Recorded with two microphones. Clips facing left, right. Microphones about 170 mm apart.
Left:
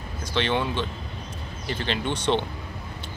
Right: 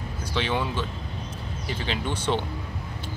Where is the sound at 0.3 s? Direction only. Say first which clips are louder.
Left 2 dB; 5° right (ahead or behind).